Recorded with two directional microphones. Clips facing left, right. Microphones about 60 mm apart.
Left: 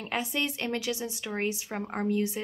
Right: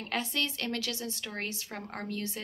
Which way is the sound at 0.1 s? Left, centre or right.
Centre.